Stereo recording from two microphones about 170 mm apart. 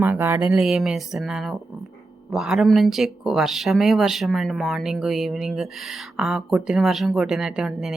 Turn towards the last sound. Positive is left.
turn(degrees=0)  # may be behind; listen again after turning